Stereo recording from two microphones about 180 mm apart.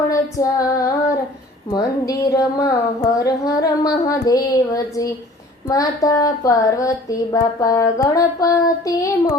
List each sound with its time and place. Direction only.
0.1 s female singing: 20° left (ahead or behind)
1.7 s speech: 20° left (ahead or behind)